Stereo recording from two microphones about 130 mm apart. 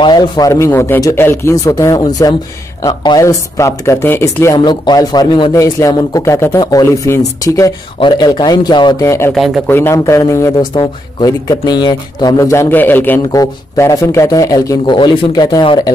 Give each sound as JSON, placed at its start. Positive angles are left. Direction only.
{"t": 0.0, "sound": "speech", "side_deg": 35}
{"t": 0.5, "sound": "speech", "side_deg": 20}
{"t": 4.6, "sound": "speech", "side_deg": 35}
{"t": 9.0, "sound": "speech", "side_deg": 20}
{"t": 10.7, "sound": "speech", "side_deg": 35}